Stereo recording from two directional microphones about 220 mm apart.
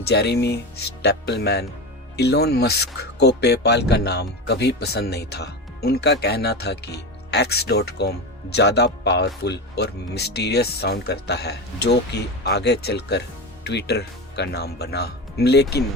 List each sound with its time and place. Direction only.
0.0 s speech: 50° left (ahead or behind)